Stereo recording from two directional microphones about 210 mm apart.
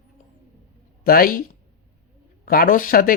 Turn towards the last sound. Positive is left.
turn(degrees=40)  # may be behind; listen again after turning